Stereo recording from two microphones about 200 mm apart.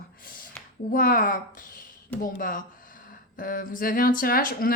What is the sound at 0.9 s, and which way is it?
Speech, 45° left (ahead or behind).